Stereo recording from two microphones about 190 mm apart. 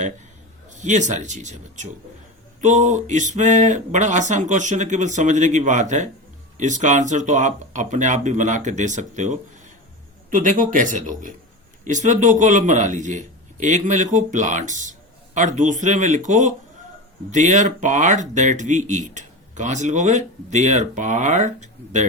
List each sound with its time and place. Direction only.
0.8 s a man's voice: 40° right (ahead or behind)